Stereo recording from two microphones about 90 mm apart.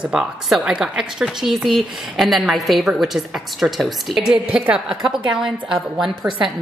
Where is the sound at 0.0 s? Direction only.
10° right (ahead or behind).